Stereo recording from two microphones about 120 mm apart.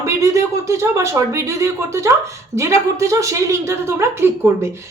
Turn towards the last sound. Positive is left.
turn(degrees=-20)  # may be behind; listen again after turning